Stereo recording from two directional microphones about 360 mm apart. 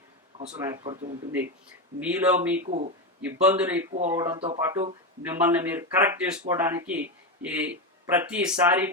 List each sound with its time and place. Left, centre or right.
0.3 s speech: centre
2.6 s speech: centre
3.2 s speech: centre
3.9 s speech: centre